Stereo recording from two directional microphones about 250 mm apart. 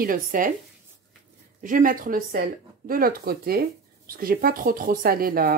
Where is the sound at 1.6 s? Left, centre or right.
Right.